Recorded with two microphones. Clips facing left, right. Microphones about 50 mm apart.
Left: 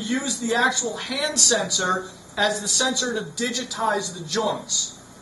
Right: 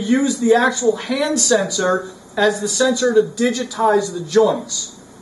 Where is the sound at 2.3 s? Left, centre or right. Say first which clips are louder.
Right 6 dB; centre.